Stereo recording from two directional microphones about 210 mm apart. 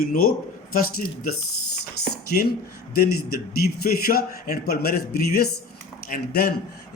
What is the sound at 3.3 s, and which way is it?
A man's voice, 45° left (ahead or behind).